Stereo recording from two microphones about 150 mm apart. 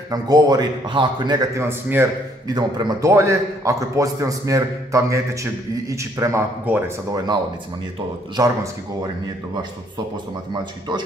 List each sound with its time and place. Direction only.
0.1 s a man's voice: 25° right (ahead or behind)
1.6 s a man's voice: 15° right (ahead or behind)
8.4 s a man's voice: 25° right (ahead or behind)
10.5 s a man's voice: 30° right (ahead or behind)